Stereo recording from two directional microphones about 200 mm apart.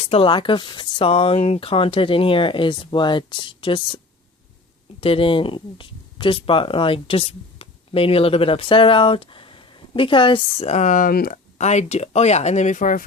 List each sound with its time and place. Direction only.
0.0 s speech: 30° left (ahead or behind)